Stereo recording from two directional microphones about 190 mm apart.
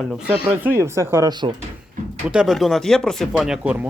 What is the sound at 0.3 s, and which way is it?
Speech, 10° right (ahead or behind).